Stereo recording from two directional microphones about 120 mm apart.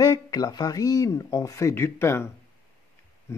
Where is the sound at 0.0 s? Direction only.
35° left (ahead or behind).